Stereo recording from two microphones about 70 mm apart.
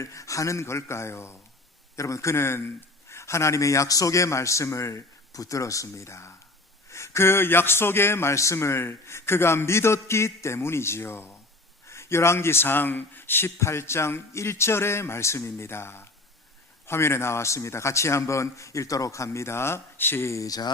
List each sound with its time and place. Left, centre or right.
0.0 s a man's voice: left